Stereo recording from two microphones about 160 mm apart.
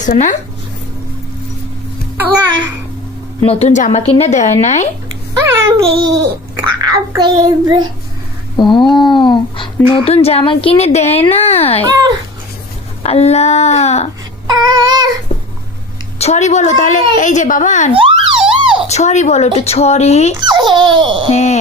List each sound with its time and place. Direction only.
0.0 s a woman's voice: 50° left (ahead or behind)
2.3 s a child's voice: 30° right (ahead or behind)
3.4 s a woman's voice: 40° left (ahead or behind)
5.5 s a child's voice: 20° right (ahead or behind)
8.5 s a sound: 30° left (ahead or behind)
10.1 s a woman's voice: 40° left (ahead or behind)
11.9 s a child's voice: 25° right (ahead or behind)
13.0 s a woman's voice: 40° left (ahead or behind)
14.4 s child singing: 25° right (ahead or behind)
16.1 s a woman's voice: 45° left (ahead or behind)
17.9 s emergency vehicle: 35° right (ahead or behind)
18.9 s a woman's voice: 45° left (ahead or behind)
20.3 s a child's voice: 25° right (ahead or behind)
21.3 s a woman's voice: 45° left (ahead or behind)